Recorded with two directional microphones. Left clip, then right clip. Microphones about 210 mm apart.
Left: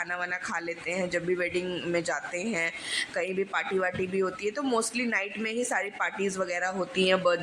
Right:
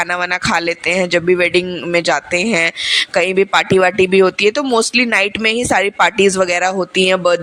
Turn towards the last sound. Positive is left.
turn(degrees=-40)  # may be behind; listen again after turning